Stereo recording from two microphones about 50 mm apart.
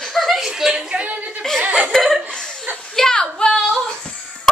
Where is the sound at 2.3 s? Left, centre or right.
Centre.